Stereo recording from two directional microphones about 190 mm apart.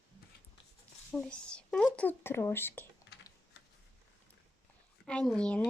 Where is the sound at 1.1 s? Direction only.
5° left (ahead or behind).